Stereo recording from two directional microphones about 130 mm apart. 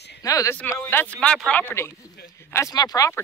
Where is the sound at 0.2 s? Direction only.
25° left (ahead or behind).